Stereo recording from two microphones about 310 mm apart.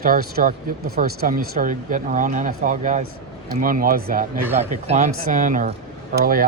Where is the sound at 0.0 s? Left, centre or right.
Right.